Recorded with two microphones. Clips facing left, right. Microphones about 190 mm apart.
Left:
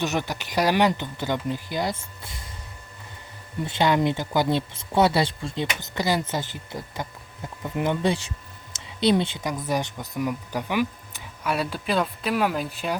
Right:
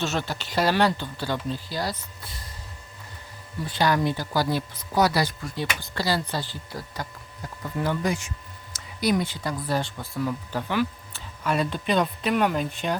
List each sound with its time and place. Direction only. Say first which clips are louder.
0.0 s speech: left 2 dB; 15° left (ahead or behind)
3.6 s speech: left 2 dB; 20° left (ahead or behind); by 13.0 s 5° left (ahead or behind)